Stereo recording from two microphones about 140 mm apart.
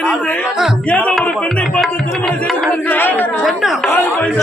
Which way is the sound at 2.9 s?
15° left (ahead or behind).